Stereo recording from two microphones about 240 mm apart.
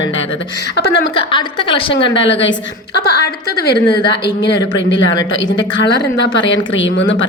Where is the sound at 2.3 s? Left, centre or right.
Left.